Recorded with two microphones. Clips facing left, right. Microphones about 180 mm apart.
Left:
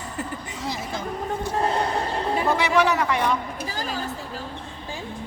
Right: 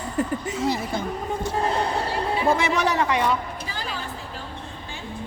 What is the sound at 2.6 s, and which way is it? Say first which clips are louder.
Speech: left 2 dB; 45° right (ahead or behind).